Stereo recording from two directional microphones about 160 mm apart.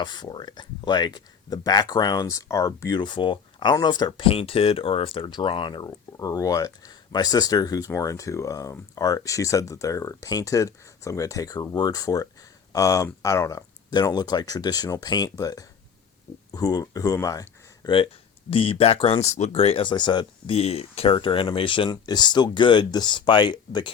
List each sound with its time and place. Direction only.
0.0 s speech: 30° left (ahead or behind)
20.6 s speech: 40° left (ahead or behind)